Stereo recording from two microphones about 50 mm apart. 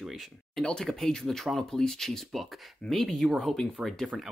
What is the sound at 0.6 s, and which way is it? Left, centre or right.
Speech, centre.